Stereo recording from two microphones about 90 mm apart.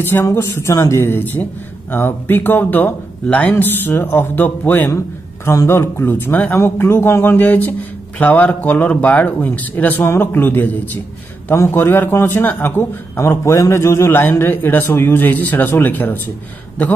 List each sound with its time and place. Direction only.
0.0 s a man's voice: 25° left (ahead or behind)
1.0 s a man's voice: 20° left (ahead or behind)
4.9 s a man's voice: 35° left (ahead or behind); by 16.2 s 20° left (ahead or behind)